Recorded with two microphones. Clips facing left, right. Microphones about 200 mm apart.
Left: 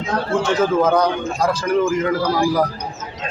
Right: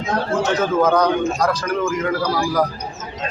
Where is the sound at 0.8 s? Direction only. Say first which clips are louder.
Right 1 dB; 10° left (ahead or behind).